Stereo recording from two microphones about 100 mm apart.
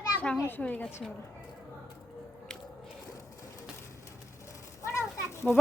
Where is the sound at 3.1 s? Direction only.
35° left (ahead or behind).